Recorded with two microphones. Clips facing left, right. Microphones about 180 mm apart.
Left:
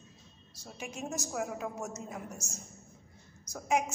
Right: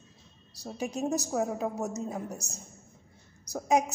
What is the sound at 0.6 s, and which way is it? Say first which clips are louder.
A woman's voice: right 9 dB; 35° right (ahead or behind).